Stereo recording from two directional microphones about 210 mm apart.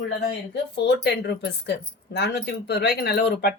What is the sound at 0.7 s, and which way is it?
Speech, 55° left (ahead or behind).